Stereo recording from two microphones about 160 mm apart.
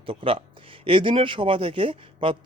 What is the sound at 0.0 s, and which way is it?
A man's voice, 35° right (ahead or behind).